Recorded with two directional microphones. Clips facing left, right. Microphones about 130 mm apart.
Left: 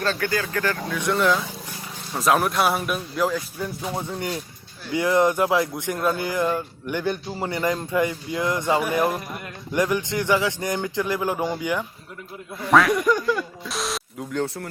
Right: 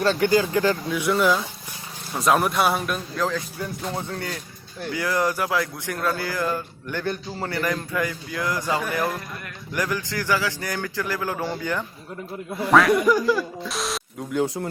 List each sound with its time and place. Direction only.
0.0 s a man's voice: 20° right (ahead or behind); by 11.9 s 10° left (ahead or behind)
12.6 s speech: centre (ahead or behind)
14.4 s speech: 15° right (ahead or behind)